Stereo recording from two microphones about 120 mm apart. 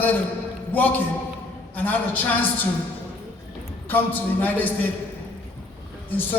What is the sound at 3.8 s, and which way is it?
A man's voice, 15° left (ahead or behind).